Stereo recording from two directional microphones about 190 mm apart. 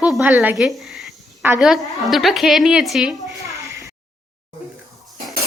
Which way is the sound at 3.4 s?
15° right (ahead or behind).